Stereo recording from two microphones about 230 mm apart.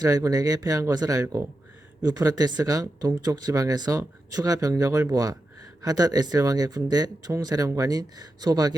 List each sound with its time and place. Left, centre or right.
0.0 s speech: centre